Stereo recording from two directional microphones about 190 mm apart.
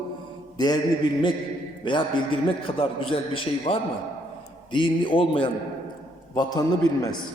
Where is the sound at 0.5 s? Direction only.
20° left (ahead or behind).